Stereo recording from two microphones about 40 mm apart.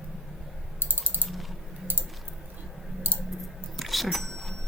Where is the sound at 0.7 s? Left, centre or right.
Right.